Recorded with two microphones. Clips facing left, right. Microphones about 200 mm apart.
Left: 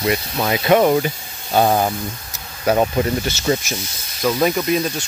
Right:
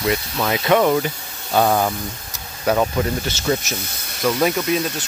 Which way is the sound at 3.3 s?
5° left (ahead or behind).